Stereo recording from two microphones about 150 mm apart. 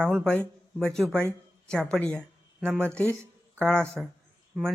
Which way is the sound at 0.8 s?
5° left (ahead or behind).